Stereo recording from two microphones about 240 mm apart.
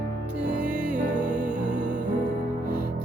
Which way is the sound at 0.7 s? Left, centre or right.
Centre.